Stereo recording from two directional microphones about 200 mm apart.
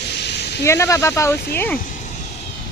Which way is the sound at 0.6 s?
15° left (ahead or behind).